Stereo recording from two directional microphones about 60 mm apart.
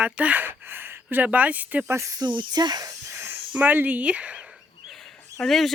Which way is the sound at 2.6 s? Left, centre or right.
Right.